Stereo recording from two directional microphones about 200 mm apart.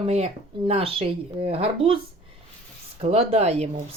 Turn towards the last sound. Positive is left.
turn(degrees=-30)  # may be behind; listen again after turning